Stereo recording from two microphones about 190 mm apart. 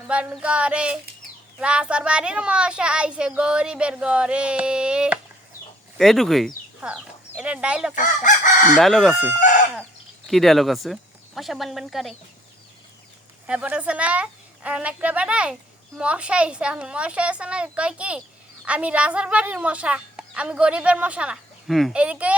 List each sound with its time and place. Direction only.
0.1 s a woman's voice: 5° right (ahead or behind)
7.9 s chicken: 45° left (ahead or behind)
8.7 s a child's voice: centre (ahead or behind)
10.2 s a child's voice: centre (ahead or behind)
13.5 s a woman's voice: 5° right (ahead or behind)